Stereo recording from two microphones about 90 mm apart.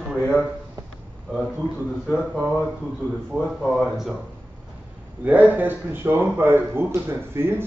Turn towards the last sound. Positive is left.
turn(degrees=-25)  # may be behind; listen again after turning